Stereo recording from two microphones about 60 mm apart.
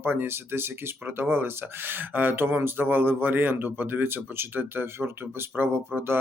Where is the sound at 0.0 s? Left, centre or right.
Right.